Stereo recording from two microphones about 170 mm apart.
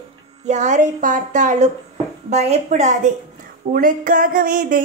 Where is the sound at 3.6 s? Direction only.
55° right (ahead or behind).